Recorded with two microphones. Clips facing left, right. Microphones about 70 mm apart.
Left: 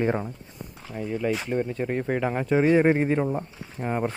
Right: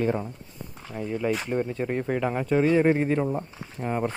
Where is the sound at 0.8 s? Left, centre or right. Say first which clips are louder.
Even; centre.